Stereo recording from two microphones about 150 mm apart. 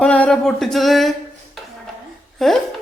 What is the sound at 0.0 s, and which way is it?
Speech, 5° left (ahead or behind).